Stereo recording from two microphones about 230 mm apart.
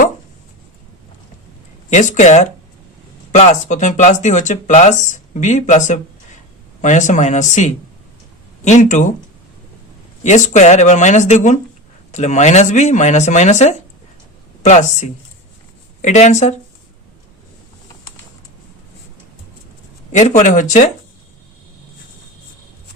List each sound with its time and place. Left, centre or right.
2.1 s speech: left
10.2 s speech: left
20.1 s speech: left